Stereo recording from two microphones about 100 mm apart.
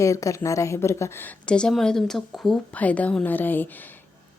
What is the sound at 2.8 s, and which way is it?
Speech, 15° left (ahead or behind).